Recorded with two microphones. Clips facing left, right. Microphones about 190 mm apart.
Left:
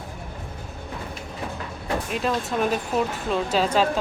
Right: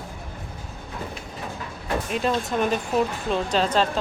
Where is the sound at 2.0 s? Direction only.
Centre (ahead or behind).